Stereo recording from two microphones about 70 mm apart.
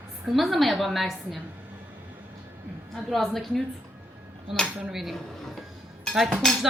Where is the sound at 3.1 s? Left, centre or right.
Centre.